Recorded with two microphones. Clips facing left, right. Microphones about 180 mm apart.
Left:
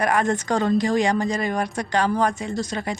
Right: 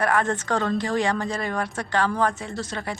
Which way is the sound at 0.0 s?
15° left (ahead or behind).